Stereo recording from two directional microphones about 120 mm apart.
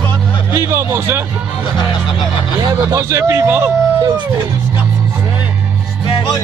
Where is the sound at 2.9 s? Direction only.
25° right (ahead or behind).